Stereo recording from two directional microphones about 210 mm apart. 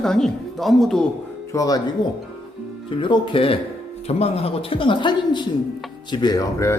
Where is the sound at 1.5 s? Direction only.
15° left (ahead or behind).